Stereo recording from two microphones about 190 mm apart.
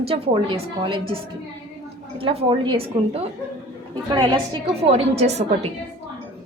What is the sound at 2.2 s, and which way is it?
A woman's voice, 30° right (ahead or behind).